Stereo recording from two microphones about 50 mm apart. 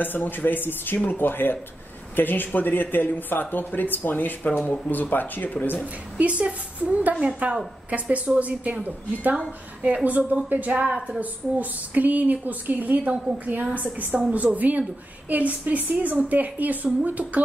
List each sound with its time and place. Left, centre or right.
0.0 s speech: left
6.1 s a woman's voice: right
8.4 s a woman's voice: right